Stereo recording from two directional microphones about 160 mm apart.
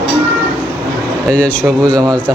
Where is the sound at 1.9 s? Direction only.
25° right (ahead or behind).